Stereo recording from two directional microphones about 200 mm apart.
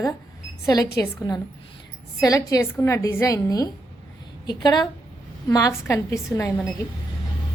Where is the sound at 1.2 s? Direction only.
20° left (ahead or behind).